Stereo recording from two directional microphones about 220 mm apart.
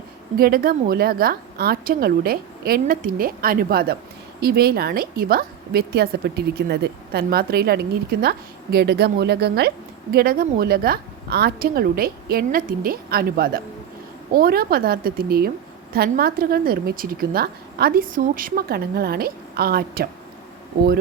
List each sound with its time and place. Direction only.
0.3 s a woman's voice: 40° right (ahead or behind)